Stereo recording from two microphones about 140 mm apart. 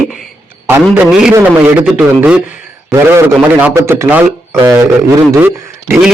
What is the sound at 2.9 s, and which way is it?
A man's voice, 20° right (ahead or behind).